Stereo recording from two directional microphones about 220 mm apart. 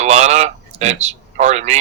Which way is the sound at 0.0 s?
30° right (ahead or behind).